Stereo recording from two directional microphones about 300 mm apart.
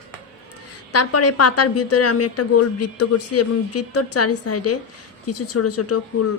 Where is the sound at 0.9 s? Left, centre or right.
Left.